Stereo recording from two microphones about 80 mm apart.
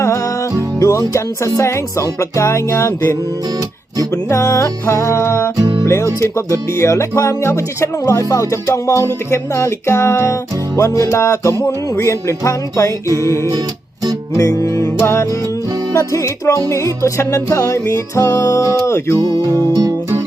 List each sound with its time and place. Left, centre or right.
0.8 s speech: left
5.5 s music: right
5.8 s speech: left
13.1 s music: right
14.3 s speech: left